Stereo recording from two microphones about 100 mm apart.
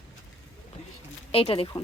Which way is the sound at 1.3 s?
70° left (ahead or behind).